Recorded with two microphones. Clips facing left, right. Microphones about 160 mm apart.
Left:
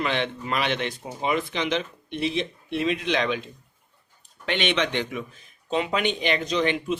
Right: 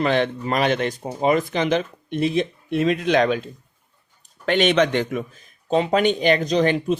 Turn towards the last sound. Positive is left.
turn(degrees=-40)  # may be behind; listen again after turning